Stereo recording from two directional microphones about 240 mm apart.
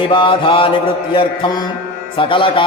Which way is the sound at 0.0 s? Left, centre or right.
Centre.